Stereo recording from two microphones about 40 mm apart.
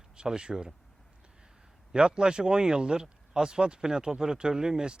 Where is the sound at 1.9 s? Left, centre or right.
Right.